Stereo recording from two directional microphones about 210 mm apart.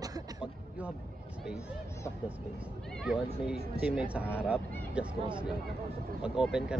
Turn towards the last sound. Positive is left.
turn(degrees=-5)  # may be behind; listen again after turning